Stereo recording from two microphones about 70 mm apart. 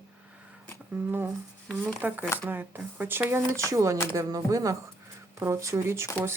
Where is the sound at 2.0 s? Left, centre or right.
Right.